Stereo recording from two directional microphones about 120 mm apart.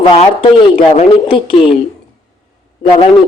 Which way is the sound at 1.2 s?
45° left (ahead or behind).